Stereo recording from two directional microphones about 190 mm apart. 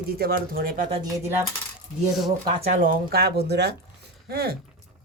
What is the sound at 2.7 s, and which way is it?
Speech, 45° right (ahead or behind).